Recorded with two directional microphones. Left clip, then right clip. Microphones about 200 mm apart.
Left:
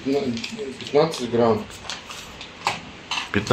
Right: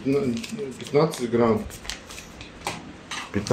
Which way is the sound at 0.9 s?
45° right (ahead or behind).